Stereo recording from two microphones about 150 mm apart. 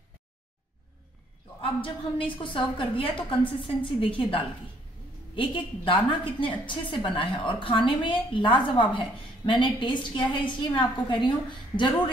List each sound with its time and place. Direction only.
1.6 s a woman's voice: 35° left (ahead or behind)